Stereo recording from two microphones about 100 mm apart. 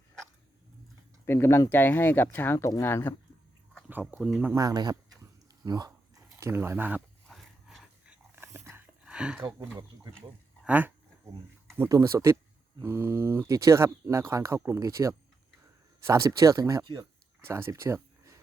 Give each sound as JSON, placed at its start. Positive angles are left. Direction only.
{"t": 1.2, "sound": "speech", "side_deg": 25}
{"t": 4.0, "sound": "speech", "side_deg": -5}
{"t": 4.5, "sound": "speech", "side_deg": -40}
{"t": 5.6, "sound": "a sound", "side_deg": -40}
{"t": 6.5, "sound": "speech", "side_deg": -25}
{"t": 7.3, "sound": "a sound", "side_deg": 0}
{"t": 8.4, "sound": "dog", "side_deg": -25}
{"t": 9.0, "sound": "a sound", "side_deg": -10}
{"t": 10.7, "sound": "speech", "side_deg": -15}
{"t": 11.9, "sound": "speech", "side_deg": -30}
{"t": 16.8, "sound": "speech", "side_deg": -55}
{"t": 17.4, "sound": "speech", "side_deg": -25}